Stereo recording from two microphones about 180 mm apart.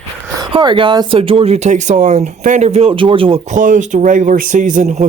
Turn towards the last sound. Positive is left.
turn(degrees=-45)  # may be behind; listen again after turning